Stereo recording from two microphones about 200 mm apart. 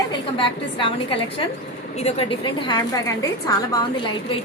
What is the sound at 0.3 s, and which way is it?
A woman's voice, 25° left (ahead or behind).